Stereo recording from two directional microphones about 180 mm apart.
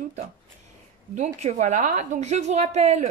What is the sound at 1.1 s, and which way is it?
A woman's voice, 40° right (ahead or behind).